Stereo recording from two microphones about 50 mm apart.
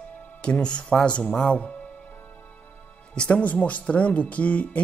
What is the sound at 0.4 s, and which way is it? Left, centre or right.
Speech, centre.